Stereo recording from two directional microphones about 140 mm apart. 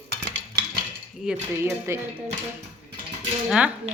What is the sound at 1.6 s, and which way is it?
Speech, 20° right (ahead or behind).